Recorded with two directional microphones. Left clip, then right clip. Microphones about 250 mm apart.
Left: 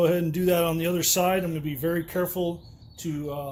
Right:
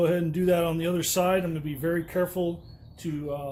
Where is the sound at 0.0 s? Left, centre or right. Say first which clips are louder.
Left 2 dB; left.